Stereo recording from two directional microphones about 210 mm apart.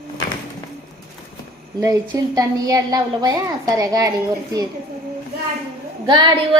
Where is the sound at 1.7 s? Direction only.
15° right (ahead or behind).